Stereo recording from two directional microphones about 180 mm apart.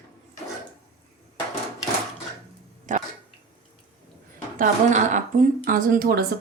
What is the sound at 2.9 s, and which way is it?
Dog, 45° right (ahead or behind).